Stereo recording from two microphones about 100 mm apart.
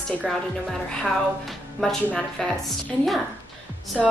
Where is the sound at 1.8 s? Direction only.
5° left (ahead or behind).